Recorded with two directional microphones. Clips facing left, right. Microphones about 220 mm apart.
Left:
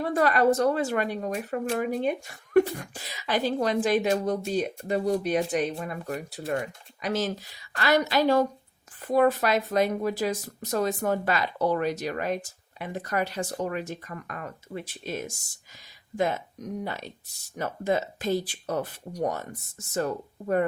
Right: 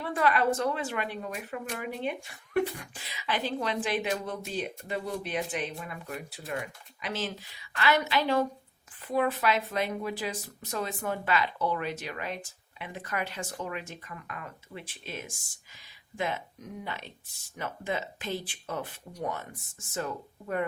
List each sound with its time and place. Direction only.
0.0 s speech: 40° left (ahead or behind)